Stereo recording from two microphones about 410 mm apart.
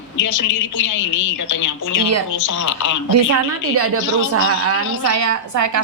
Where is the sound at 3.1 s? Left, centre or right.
Right.